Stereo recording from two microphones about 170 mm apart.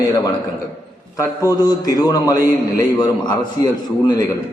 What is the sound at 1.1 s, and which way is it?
A man's voice, 20° left (ahead or behind).